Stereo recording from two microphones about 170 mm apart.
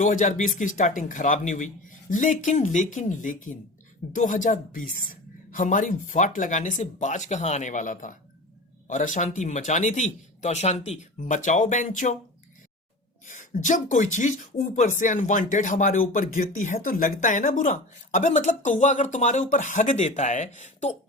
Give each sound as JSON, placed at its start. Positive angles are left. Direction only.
{"t": 0.0, "sound": "speech", "side_deg": 45}
{"t": 13.2, "sound": "speech", "side_deg": 50}